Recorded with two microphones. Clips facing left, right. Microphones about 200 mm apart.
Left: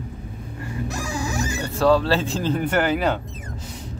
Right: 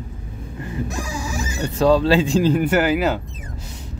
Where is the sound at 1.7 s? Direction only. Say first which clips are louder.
Right 3 dB; 15° right (ahead or behind).